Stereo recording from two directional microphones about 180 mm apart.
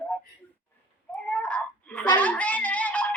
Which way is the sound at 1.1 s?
5° left (ahead or behind).